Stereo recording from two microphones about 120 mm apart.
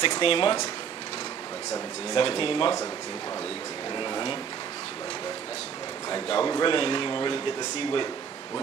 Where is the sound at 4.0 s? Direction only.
45° left (ahead or behind).